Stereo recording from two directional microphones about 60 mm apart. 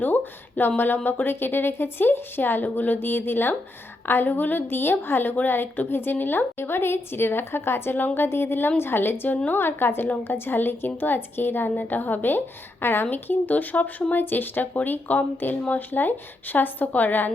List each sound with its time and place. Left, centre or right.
0.0 s a woman's voice: left